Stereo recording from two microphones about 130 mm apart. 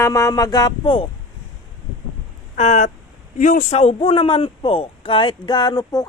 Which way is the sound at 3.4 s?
80° left.